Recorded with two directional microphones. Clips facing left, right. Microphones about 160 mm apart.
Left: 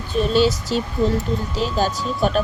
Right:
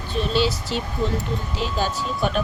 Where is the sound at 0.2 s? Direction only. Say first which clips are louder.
Left 5 dB; 45° left (ahead or behind).